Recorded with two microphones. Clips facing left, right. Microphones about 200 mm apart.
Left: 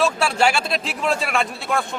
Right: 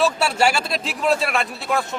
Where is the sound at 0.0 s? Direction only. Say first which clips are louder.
Even; 5° right (ahead or behind).